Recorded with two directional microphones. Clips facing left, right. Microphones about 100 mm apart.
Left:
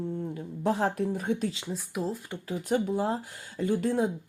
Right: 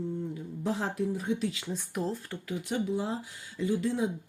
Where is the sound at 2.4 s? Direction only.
40° left (ahead or behind).